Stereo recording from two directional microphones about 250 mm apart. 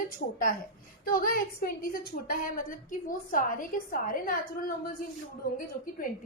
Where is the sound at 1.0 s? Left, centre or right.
Left.